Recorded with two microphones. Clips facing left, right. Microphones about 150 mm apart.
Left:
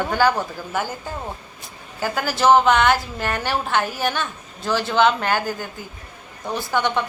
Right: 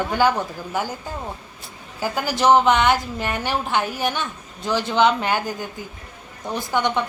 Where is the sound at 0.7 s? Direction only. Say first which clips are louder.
Even; 15° right (ahead or behind).